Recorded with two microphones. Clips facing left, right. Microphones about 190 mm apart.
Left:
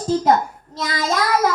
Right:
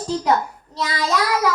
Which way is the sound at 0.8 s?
45° left (ahead or behind).